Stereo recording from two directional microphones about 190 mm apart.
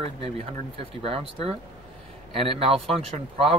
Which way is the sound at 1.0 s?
30° right (ahead or behind).